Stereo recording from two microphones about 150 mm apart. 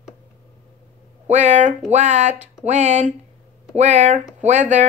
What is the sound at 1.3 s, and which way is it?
Speech, 50° right (ahead or behind).